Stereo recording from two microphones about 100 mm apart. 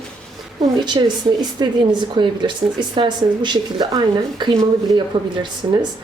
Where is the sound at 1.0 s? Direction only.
45° right (ahead or behind).